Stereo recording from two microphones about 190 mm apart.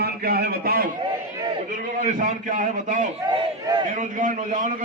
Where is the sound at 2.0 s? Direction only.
40° right (ahead or behind).